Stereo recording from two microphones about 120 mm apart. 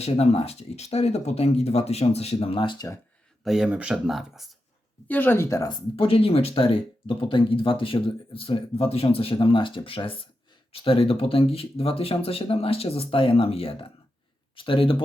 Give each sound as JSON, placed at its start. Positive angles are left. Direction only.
{"t": 0.0, "sound": "speech", "side_deg": 60}
{"t": 2.7, "sound": "speech", "side_deg": 25}
{"t": 3.4, "sound": "speech", "side_deg": -5}
{"t": 5.0, "sound": "speech", "side_deg": 15}
{"t": 5.7, "sound": "speech", "side_deg": 50}